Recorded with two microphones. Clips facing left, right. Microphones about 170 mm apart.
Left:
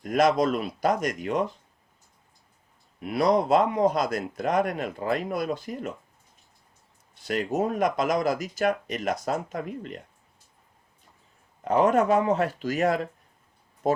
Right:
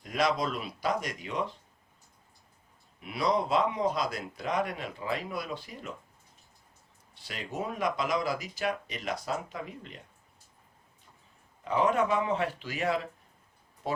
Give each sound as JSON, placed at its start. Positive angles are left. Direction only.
{"t": 0.0, "sound": "speech", "side_deg": 50}
{"t": 3.0, "sound": "speech", "side_deg": 50}
{"t": 7.3, "sound": "speech", "side_deg": 45}
{"t": 11.6, "sound": "speech", "side_deg": 50}